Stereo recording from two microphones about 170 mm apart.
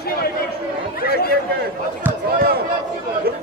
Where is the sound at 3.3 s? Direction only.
60° right (ahead or behind).